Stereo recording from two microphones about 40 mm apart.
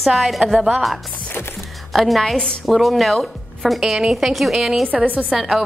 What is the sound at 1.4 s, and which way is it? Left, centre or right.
Speech, left.